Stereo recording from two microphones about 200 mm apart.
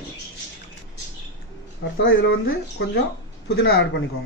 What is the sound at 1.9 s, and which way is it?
Speech, 65° left (ahead or behind).